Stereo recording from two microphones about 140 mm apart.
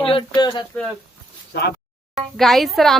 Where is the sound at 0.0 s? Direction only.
40° left (ahead or behind).